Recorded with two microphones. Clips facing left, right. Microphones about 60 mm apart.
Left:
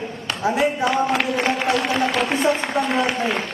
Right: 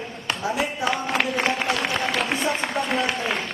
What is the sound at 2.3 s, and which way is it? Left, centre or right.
Speech, left.